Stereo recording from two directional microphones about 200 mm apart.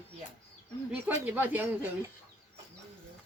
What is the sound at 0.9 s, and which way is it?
Speech, 10° right (ahead or behind).